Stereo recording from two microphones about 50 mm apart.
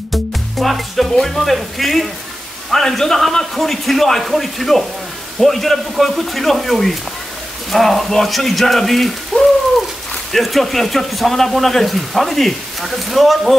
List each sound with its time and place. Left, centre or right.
0.1 s music: centre
1.1 s speech: centre